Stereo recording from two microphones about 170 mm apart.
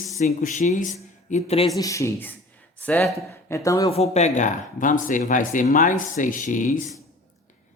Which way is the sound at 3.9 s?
40° left (ahead or behind).